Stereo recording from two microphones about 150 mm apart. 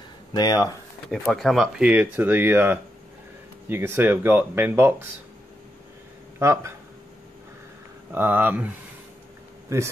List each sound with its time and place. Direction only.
0.3 s speech: 25° left (ahead or behind)
1.2 s speech: centre (ahead or behind)
6.4 s speech: 20° right (ahead or behind)
8.1 s speech: 15° right (ahead or behind)